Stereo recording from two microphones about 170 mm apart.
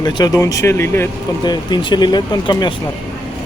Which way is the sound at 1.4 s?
25° left (ahead or behind).